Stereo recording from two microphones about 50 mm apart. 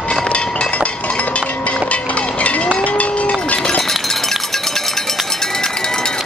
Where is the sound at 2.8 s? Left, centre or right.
Left.